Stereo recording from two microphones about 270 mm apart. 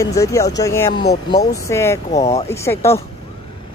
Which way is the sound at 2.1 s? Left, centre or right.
Left.